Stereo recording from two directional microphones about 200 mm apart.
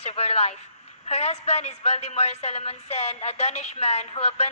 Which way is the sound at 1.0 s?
35° left (ahead or behind).